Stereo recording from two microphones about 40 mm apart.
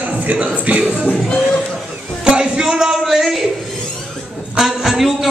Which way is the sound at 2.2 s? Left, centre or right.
Right.